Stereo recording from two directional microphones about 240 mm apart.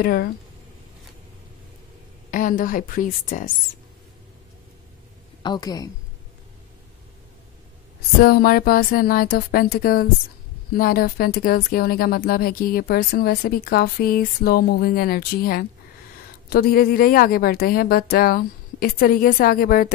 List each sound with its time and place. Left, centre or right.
0.0 s speech: left
2.3 s speech: left
5.4 s a woman's voice: centre
8.2 s speech: left